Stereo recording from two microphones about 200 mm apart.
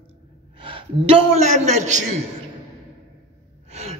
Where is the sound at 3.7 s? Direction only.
35° right (ahead or behind).